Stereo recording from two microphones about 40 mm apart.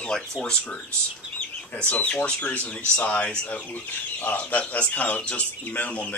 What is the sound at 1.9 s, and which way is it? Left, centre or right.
Speech, left.